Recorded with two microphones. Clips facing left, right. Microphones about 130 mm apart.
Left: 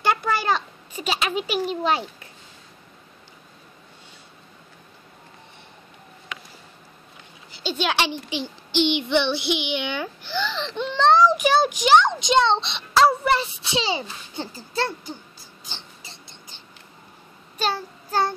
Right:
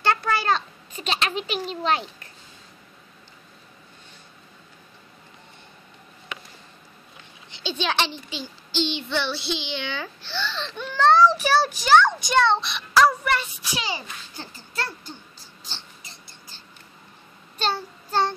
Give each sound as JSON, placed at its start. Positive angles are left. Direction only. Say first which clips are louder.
{"t": 0.0, "sound": "a sound", "louder": "even", "side_deg": 10}
{"t": 7.6, "sound": "a child's voice", "louder": "left 2 dB", "side_deg": 10}
{"t": 16.0, "sound": "rodents", "louder": "left 2 dB", "side_deg": 25}
{"t": 17.6, "sound": "child singing", "louder": "left 1 dB", "side_deg": 10}